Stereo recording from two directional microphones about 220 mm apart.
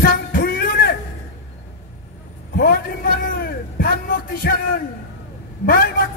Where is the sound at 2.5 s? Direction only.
45° left (ahead or behind).